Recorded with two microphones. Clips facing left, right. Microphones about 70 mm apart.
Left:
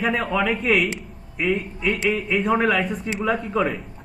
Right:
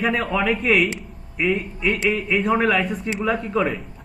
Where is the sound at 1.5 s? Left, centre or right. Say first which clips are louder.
Right 1 dB; right.